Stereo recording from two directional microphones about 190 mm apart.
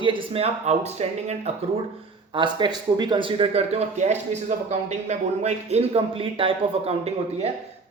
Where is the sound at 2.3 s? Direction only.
25° right (ahead or behind).